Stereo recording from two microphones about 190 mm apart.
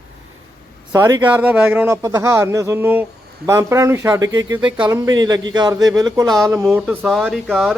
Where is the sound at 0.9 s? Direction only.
20° right (ahead or behind).